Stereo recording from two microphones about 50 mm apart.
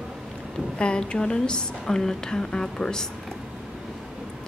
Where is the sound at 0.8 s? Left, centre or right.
Centre.